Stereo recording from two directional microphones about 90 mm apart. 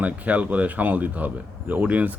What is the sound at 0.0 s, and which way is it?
Speech, 15° right (ahead or behind).